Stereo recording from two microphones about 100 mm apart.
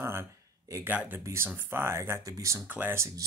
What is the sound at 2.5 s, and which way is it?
Speech, 20° right (ahead or behind).